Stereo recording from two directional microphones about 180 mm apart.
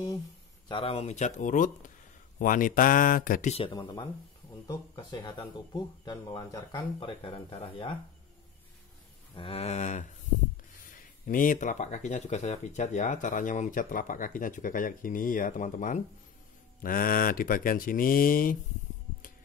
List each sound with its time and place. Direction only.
0.7 s speech: 30° left (ahead or behind); by 3.5 s 50° left (ahead or behind)
3.5 s speech: 25° left (ahead or behind)
9.3 s speech: 30° left (ahead or behind); by 18.6 s 50° left (ahead or behind)